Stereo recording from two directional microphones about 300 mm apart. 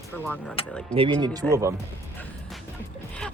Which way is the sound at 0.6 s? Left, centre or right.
Centre.